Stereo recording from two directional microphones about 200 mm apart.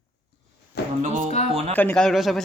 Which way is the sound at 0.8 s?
55° left (ahead or behind).